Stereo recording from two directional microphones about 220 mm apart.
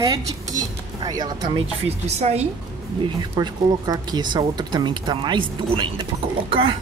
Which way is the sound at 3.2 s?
20° right (ahead or behind).